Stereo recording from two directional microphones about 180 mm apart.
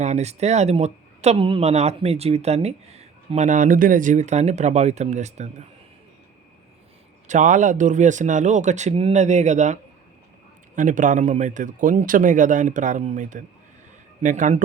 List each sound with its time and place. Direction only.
0.0 s speech: 40° right (ahead or behind)
7.3 s a man's voice: 45° right (ahead or behind)